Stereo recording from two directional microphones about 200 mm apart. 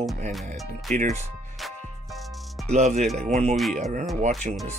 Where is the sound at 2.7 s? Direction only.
35° right (ahead or behind).